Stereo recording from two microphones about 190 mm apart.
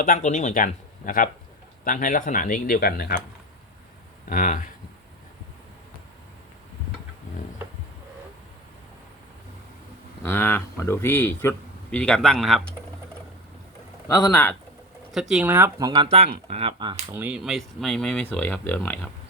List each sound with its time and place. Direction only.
0.0 s speech: 40° left (ahead or behind)
4.3 s speech: 45° left (ahead or behind)
10.2 s speech: 15° left (ahead or behind)
14.1 s a man's voice: 20° left (ahead or behind)
15.1 s speech: 5° right (ahead or behind); by 16.0 s 20° right (ahead or behind)
16.0 s speech: 35° right (ahead or behind)
17.1 s speech: 10° right (ahead or behind); by 19.1 s 10° left (ahead or behind)